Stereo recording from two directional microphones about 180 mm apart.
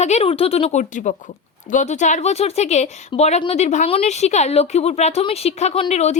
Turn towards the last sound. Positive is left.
turn(degrees=35)  # may be behind; listen again after turning